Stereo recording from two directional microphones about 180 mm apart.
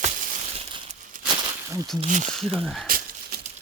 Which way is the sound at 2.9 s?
55° right (ahead or behind).